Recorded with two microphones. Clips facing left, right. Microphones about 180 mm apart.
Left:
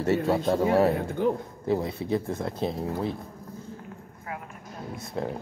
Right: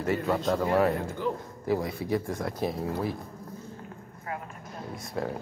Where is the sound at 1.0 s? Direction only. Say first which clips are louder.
Left 5 dB; 55° left (ahead or behind).